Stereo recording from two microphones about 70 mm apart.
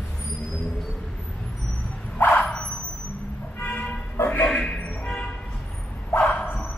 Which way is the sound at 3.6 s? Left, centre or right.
Left.